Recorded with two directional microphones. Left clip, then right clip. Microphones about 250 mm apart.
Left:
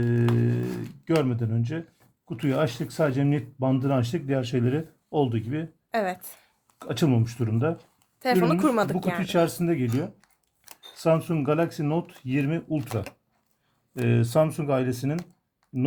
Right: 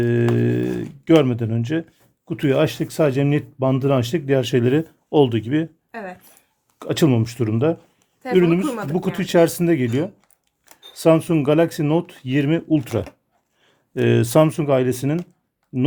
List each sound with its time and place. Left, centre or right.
0.0 s speech: right
0.3 s music: right
1.0 s speech: right
5.9 s a woman's voice: left
6.7 s speech: right
8.6 s speech: left
9.1 s speech: right